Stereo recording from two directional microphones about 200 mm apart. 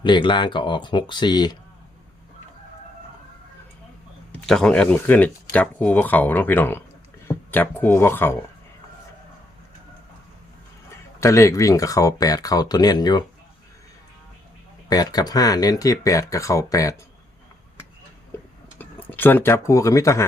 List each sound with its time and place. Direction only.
0.0 s speech: 25° left (ahead or behind)
4.4 s speech: 5° left (ahead or behind)
11.2 s speech: 15° left (ahead or behind)
14.8 s speech: 20° left (ahead or behind)
18.3 s a sound: 10° left (ahead or behind)
18.8 s speech: 10° left (ahead or behind)